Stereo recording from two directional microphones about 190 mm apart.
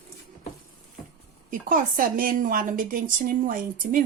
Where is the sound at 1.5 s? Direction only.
45° right (ahead or behind).